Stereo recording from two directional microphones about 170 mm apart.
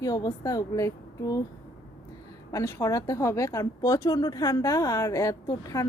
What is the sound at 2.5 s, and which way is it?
Speech, 20° left (ahead or behind).